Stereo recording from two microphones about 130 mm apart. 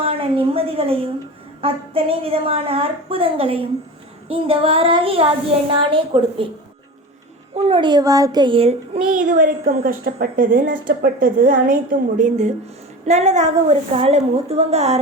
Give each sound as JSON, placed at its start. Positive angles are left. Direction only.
{"t": 0.0, "sound": "a woman's voice", "side_deg": -45}
{"t": 7.7, "sound": "speech", "side_deg": -35}
{"t": 9.0, "sound": "a woman's voice", "side_deg": -90}